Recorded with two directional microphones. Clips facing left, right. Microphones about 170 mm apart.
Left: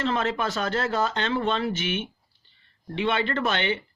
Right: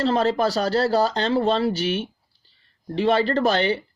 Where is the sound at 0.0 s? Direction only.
35° right (ahead or behind).